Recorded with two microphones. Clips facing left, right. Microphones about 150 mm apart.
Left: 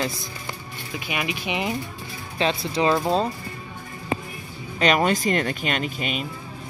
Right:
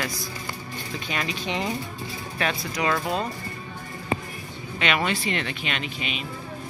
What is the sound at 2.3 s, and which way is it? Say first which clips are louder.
Speech: left 5 dB; 25° left (ahead or behind).